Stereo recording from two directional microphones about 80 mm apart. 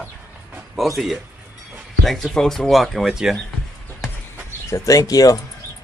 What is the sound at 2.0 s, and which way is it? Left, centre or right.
Speech, centre.